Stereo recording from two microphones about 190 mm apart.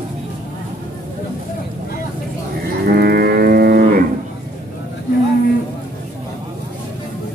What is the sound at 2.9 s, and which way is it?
Cattle, 55° right (ahead or behind).